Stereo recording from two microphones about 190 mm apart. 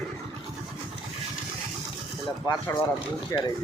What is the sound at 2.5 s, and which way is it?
Speech, 20° left (ahead or behind).